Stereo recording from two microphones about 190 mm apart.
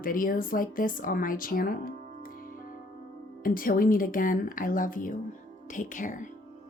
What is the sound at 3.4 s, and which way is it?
Speech, 45° left (ahead or behind).